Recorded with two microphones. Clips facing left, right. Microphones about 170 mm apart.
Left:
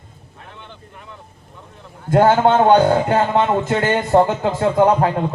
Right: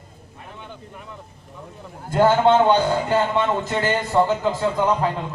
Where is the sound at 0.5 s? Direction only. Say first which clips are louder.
Right 3 dB; 5° right (ahead or behind).